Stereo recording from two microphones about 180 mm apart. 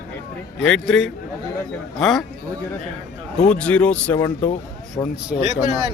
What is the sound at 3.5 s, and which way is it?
Speech, 5° left (ahead or behind).